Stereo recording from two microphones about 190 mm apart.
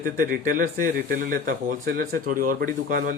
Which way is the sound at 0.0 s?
45° right (ahead or behind).